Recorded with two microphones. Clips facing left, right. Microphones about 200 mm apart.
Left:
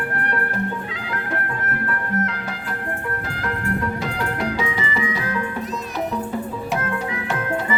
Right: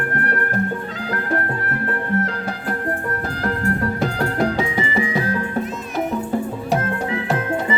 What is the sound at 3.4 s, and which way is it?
Music, 40° right (ahead or behind).